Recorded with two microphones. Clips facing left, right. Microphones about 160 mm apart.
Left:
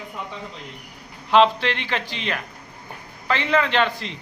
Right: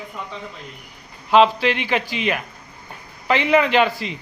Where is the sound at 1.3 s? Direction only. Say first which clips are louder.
Right 2 dB; 5° right (ahead or behind).